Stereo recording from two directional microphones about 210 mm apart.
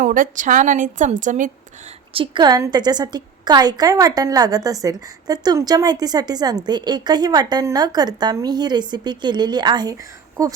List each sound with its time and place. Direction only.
0.0 s a woman's voice: 40° right (ahead or behind)
2.1 s a woman's voice: 25° right (ahead or behind)